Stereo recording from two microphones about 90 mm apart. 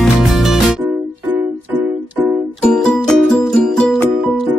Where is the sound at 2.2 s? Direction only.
25° right (ahead or behind).